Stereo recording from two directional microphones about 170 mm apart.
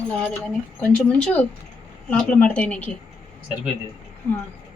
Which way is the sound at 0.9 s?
5° left (ahead or behind).